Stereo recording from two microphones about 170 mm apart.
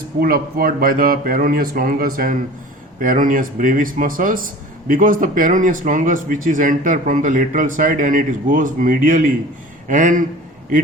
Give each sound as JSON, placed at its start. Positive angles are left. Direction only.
{"t": 0.2, "sound": "speech", "side_deg": -60}